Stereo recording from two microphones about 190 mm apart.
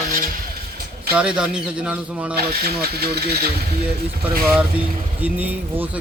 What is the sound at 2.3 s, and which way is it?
Speech, 55° right (ahead or behind).